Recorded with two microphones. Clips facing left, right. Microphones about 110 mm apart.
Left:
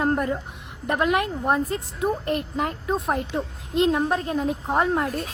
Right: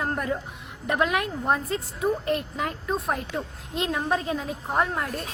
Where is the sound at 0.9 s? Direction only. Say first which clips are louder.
Left 2 dB; 15° left (ahead or behind).